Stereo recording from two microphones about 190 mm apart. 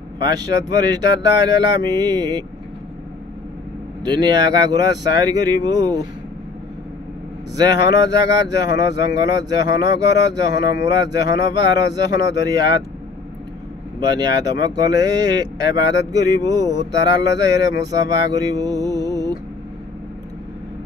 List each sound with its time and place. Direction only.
0.2 s speech: 20° right (ahead or behind)
4.1 s speech: 20° right (ahead or behind)
7.5 s speech: 20° right (ahead or behind)
13.9 s speech: 20° right (ahead or behind)